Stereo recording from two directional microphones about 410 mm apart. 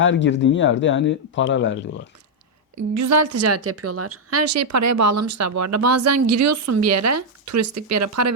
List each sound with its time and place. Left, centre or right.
0.0 s speech: left
2.9 s a woman's voice: right